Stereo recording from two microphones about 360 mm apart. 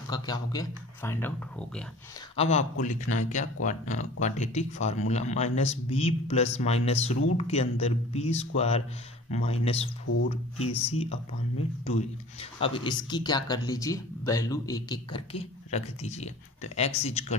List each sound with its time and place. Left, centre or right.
0.1 s speech: centre
2.3 s speech: centre
12.4 s speech: centre